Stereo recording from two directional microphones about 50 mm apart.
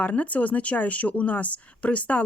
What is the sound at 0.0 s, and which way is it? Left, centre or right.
Speech, left.